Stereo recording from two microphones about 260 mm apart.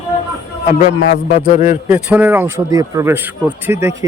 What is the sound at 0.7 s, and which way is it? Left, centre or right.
A man's voice, left.